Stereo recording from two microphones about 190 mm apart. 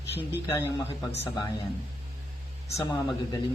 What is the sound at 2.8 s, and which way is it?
Speech, 15° left (ahead or behind).